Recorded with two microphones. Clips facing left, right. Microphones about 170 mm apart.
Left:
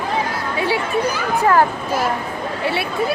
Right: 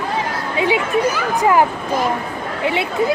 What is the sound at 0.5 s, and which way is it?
Children playing, 20° right (ahead or behind).